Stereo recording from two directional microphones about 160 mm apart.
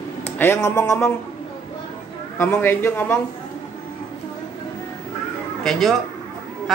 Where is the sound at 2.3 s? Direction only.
15° left (ahead or behind).